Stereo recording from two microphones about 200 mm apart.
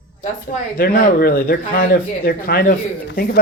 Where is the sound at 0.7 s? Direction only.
45° left (ahead or behind).